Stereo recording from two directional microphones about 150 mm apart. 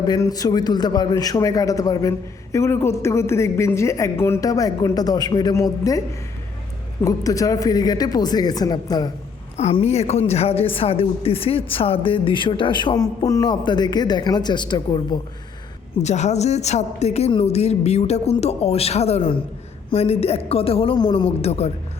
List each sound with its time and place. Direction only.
0.0 s a man's voice: 25° left (ahead or behind)
7.0 s a man's voice: 20° left (ahead or behind)
9.6 s a woman's voice: 45° left (ahead or behind); by 15.2 s 30° left (ahead or behind)
16.0 s a woman's voice: 50° left (ahead or behind); by 21.2 s 30° left (ahead or behind)
21.4 s a woman's voice: 45° left (ahead or behind)